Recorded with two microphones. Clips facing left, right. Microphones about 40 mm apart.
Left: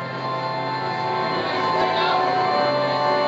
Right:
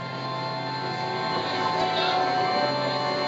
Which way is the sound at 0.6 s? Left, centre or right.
Centre.